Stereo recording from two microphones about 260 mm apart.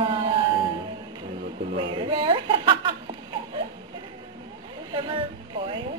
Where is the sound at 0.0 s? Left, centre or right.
Centre.